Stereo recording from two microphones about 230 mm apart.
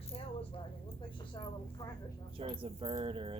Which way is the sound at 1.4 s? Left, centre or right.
Centre.